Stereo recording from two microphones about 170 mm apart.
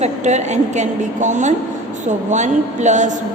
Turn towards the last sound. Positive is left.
turn(degrees=-45)  # may be behind; listen again after turning